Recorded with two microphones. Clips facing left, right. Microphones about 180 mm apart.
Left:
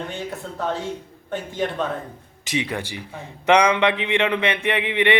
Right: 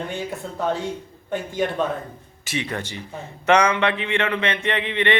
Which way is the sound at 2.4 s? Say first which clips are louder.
Left 2 dB; 15° left (ahead or behind).